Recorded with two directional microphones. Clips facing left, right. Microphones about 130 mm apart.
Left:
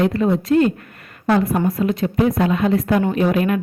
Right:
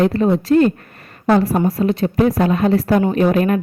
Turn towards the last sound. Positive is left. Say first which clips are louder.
# right 3 dB
turn(degrees=-40)  # may be behind; listen again after turning